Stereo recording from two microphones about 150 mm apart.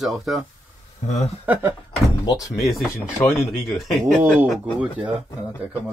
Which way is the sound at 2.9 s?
20° left (ahead or behind).